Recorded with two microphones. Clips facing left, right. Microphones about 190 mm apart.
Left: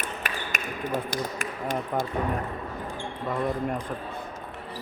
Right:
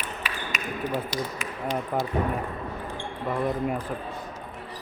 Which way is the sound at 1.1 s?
50° left (ahead or behind).